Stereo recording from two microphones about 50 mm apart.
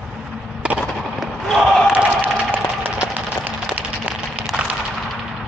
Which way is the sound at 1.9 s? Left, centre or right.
Right.